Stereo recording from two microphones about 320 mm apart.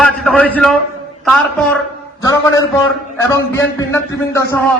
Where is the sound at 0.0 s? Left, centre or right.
Centre.